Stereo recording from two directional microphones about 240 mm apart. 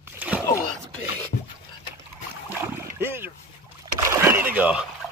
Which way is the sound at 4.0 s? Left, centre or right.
Centre.